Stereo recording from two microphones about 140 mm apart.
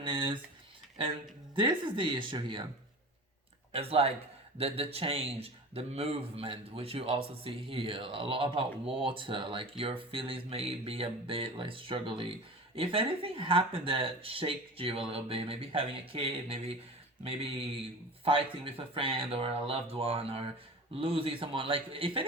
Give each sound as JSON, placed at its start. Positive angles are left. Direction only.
{"t": 0.0, "sound": "a sound", "side_deg": -35}
{"t": 1.5, "sound": "speech", "side_deg": -35}
{"t": 3.7, "sound": "speech", "side_deg": -45}